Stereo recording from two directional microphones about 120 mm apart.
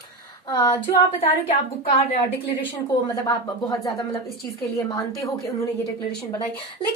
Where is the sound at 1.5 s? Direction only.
55° left (ahead or behind).